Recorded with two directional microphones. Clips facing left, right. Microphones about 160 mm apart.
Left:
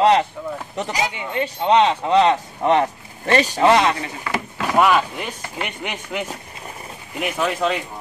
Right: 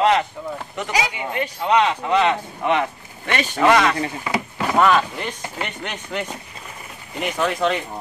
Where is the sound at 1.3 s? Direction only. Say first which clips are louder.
Left 4 dB; 25° left (ahead or behind).